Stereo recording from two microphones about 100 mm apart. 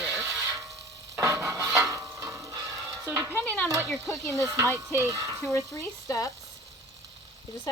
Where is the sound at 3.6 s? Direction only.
30° right (ahead or behind).